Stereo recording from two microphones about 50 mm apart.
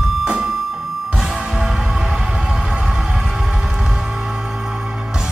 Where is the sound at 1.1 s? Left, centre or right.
Centre.